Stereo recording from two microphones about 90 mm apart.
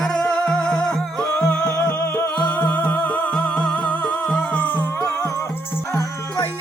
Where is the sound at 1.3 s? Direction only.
15° left (ahead or behind).